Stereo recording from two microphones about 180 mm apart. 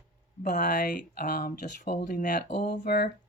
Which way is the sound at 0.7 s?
50° left (ahead or behind).